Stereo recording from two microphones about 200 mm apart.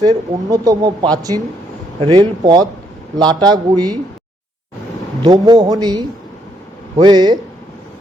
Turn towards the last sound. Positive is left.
turn(degrees=-20)  # may be behind; listen again after turning